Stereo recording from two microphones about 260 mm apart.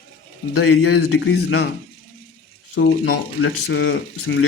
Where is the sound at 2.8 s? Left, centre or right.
Left.